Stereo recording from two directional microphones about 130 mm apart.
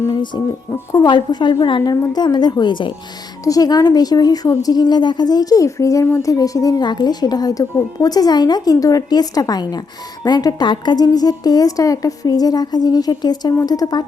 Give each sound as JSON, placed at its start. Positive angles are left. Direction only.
{"t": 0.7, "sound": "a woman's voice", "side_deg": 30}